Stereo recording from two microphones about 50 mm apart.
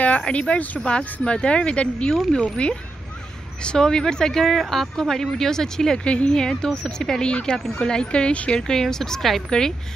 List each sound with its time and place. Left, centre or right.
0.2 s speech: left
4.4 s speech: centre
6.0 s speech: left
8.5 s speech: centre